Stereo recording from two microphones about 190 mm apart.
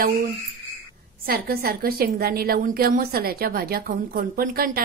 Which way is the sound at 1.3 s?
50° right (ahead or behind).